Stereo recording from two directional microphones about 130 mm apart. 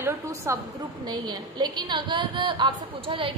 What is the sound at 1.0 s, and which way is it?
A woman's voice, 35° right (ahead or behind).